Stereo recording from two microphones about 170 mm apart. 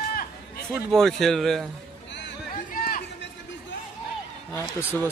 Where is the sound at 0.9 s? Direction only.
Centre (ahead or behind).